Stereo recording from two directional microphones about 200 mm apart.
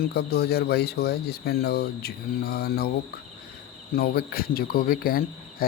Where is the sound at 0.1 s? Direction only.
50° left (ahead or behind).